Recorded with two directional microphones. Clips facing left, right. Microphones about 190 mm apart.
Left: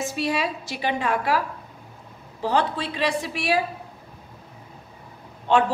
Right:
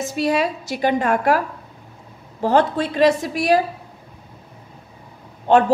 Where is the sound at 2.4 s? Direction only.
45° right (ahead or behind).